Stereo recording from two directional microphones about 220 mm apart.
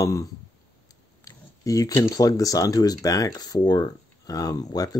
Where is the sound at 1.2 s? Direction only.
15° left (ahead or behind).